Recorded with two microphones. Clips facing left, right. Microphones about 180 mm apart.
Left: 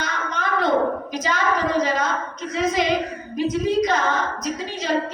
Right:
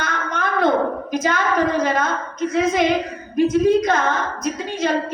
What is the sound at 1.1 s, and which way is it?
A woman's voice, 50° right (ahead or behind).